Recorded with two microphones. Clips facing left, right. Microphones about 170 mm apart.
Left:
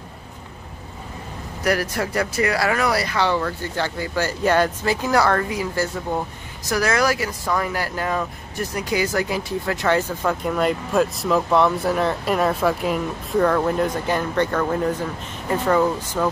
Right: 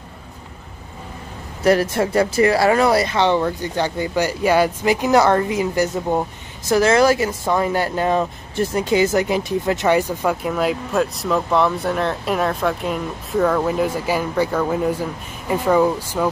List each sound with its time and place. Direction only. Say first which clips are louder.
1.6 s speech: right 6 dB; 25° right (ahead or behind)
10.4 s speech: right 1 dB; centre (ahead or behind)